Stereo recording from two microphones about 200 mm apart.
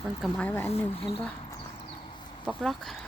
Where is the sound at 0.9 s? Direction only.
30° left (ahead or behind).